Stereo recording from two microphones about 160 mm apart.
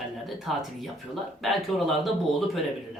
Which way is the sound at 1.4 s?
Centre (ahead or behind).